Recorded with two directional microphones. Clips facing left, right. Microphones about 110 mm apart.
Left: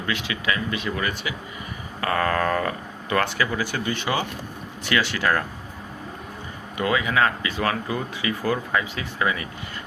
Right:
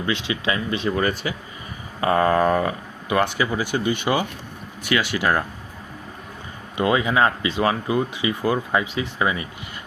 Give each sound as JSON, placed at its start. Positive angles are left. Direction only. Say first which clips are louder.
{"t": 0.0, "sound": "speech", "louder": "right 3 dB", "side_deg": -25}
{"t": 2.0, "sound": "speech", "louder": "right 5 dB", "side_deg": -20}
{"t": 6.7, "sound": "speech", "louder": "right 3 dB", "side_deg": -25}